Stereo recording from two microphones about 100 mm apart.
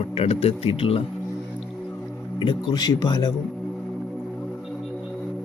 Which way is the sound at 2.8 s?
45° left (ahead or behind).